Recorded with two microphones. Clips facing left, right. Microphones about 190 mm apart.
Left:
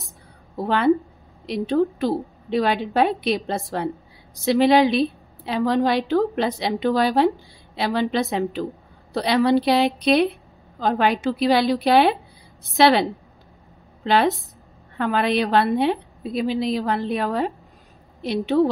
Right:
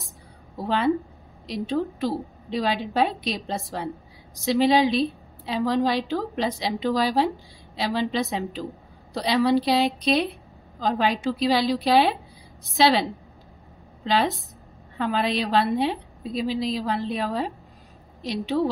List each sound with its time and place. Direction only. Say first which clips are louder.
0.7 s a woman's voice: left 4 dB; 60° left (ahead or behind)
15.0 s a woman's voice: left 4 dB; 60° left (ahead or behind)